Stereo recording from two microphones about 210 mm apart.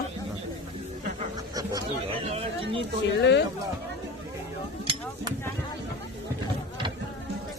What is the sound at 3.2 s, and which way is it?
Speech, 55° left (ahead or behind).